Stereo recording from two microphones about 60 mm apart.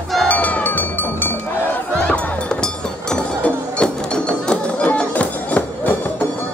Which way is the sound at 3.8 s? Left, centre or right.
Centre.